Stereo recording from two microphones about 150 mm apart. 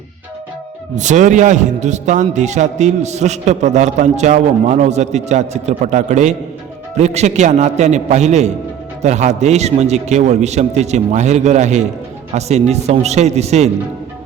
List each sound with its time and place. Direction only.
0.9 s a man's voice: 55° right (ahead or behind)